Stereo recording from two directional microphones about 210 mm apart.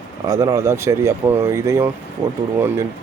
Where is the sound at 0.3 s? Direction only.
20° right (ahead or behind).